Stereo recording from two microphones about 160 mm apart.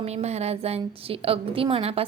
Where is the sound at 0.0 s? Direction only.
40° right (ahead or behind).